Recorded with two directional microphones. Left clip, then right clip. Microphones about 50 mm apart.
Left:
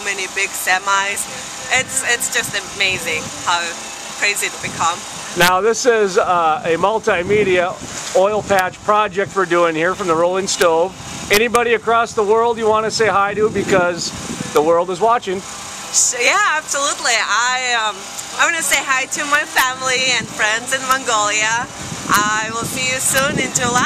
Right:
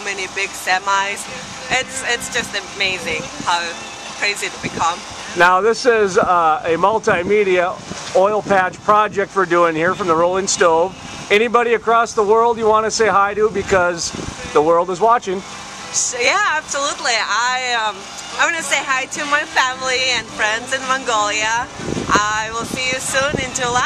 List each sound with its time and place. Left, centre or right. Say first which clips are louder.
0.0 s speech: left 2 dB; centre
6.0 s speech: right 1 dB; centre
13.0 s speech: right 1 dB; centre
13.9 s speech: left 1 dB; right
15.0 s speech: right 1 dB; centre
15.9 s speech: left 2 dB; centre